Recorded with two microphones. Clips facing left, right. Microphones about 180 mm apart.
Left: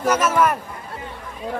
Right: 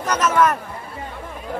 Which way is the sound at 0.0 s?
10° left (ahead or behind).